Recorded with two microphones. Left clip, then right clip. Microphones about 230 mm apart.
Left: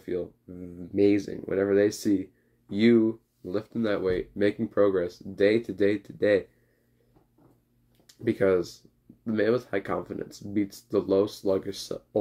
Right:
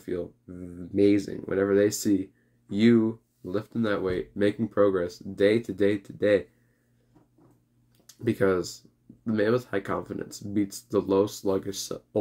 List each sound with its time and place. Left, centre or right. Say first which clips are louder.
0.0 s speech: left 1 dB; centre
8.2 s speech: left 1 dB; centre